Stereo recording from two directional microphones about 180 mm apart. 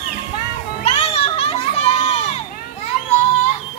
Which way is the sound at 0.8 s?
35° left (ahead or behind).